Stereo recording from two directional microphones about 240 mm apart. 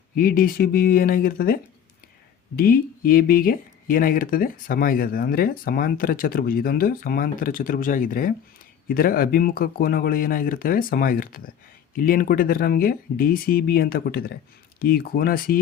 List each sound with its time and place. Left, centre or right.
0.2 s speech: left
2.6 s speech: left